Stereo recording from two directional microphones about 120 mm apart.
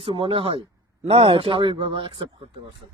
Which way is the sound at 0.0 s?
50° right (ahead or behind).